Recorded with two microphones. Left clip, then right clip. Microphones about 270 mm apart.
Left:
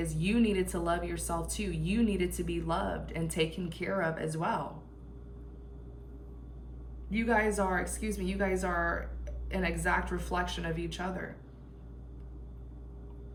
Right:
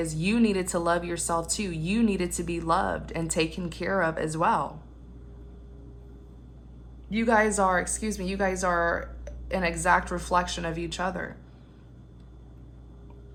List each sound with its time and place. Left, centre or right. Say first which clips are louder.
0.2 s speech: right 3 dB; centre
7.1 s a woman's voice: right 6 dB; centre